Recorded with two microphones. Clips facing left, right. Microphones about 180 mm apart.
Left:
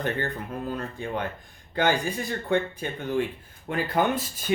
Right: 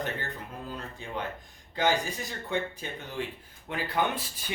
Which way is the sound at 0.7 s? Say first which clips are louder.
Left 6 dB; 55° left (ahead or behind).